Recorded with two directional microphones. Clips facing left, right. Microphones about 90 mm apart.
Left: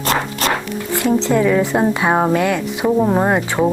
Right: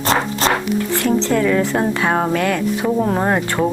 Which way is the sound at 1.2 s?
10° left (ahead or behind).